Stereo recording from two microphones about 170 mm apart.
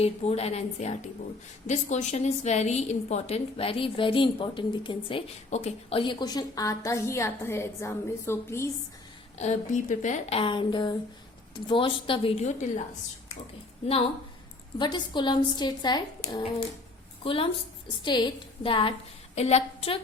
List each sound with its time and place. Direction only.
0.0 s a woman's voice: 35° left (ahead or behind); by 8.7 s 15° left (ahead or behind)
9.4 s a woman's voice: 45° left (ahead or behind)
14.8 s a woman's voice: 25° left (ahead or behind)